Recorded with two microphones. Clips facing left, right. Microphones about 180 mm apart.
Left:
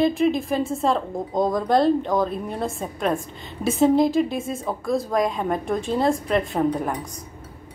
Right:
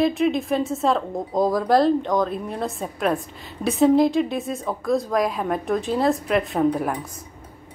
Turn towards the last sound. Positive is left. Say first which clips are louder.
# right 1 dB
turn(degrees=-5)  # may be behind; listen again after turning